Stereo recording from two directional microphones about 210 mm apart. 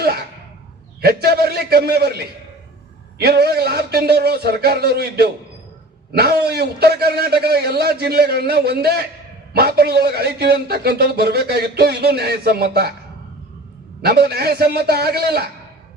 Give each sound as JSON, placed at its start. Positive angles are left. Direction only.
{"t": 0.0, "sound": "a sound", "side_deg": -45}
{"t": 1.0, "sound": "a man's voice", "side_deg": -50}
{"t": 14.0, "sound": "a man's voice", "side_deg": -50}